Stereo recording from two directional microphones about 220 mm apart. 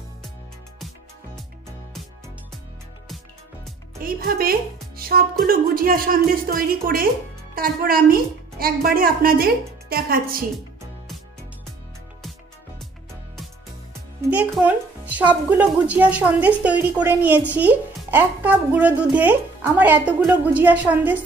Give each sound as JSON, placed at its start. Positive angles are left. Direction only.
{"t": 4.0, "sound": "a woman's voice", "side_deg": -40}
{"t": 14.3, "sound": "speech", "side_deg": -5}